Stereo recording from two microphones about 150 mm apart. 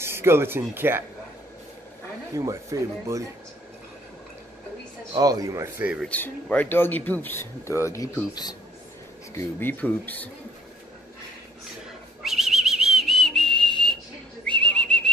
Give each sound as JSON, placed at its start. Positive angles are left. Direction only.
{"t": 0.0, "sound": "speech", "side_deg": -15}
{"t": 2.3, "sound": "speech", "side_deg": -20}
{"t": 5.1, "sound": "speech", "side_deg": -25}
{"t": 6.0, "sound": "speech", "side_deg": 10}
{"t": 9.3, "sound": "speech", "side_deg": 15}
{"t": 12.2, "sound": "whistle", "side_deg": -5}
{"t": 14.4, "sound": "whistling", "side_deg": 5}